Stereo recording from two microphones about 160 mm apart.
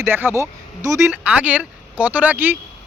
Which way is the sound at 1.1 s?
10° right (ahead or behind).